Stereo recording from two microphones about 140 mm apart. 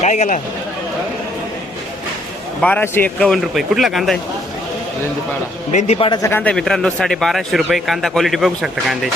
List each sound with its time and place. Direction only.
0.0 s speech: 55° left (ahead or behind)
2.6 s a man's voice: 10° left (ahead or behind)
3.2 s speech: centre (ahead or behind)
5.7 s a man's voice: 50° left (ahead or behind)
6.2 s speech: 10° left (ahead or behind); by 9.0 s 5° right (ahead or behind)